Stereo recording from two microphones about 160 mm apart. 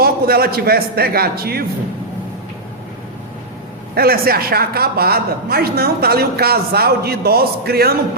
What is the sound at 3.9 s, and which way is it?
A man's voice, 70° right (ahead or behind).